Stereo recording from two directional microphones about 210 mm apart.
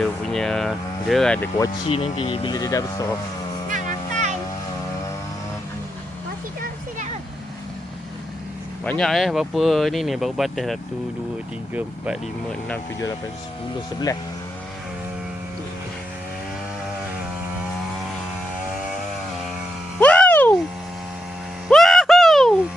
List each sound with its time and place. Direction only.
0.0 s speech: centre (ahead or behind)
1.9 s speech: 30° left (ahead or behind)
8.8 s speech: 5° left (ahead or behind)
14.1 s speech: 15° left (ahead or behind)
20.0 s a sound: 5° left (ahead or behind)
21.7 s a sound: centre (ahead or behind)